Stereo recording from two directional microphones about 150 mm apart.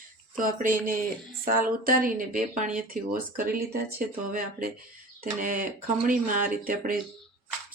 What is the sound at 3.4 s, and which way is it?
Speech, 75° right (ahead or behind).